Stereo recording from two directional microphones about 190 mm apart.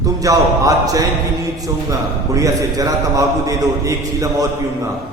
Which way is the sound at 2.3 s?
20° right (ahead or behind).